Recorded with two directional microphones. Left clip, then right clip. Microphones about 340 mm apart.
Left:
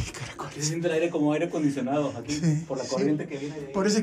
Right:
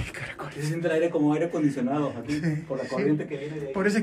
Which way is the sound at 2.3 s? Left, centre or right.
Centre.